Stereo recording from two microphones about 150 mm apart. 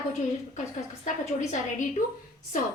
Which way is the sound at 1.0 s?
50° left (ahead or behind).